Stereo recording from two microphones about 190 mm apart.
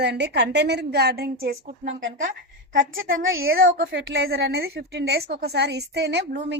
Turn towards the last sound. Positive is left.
turn(degrees=-65)  # may be behind; listen again after turning